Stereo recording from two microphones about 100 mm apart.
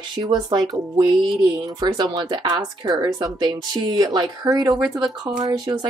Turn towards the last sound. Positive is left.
turn(degrees=-35)  # may be behind; listen again after turning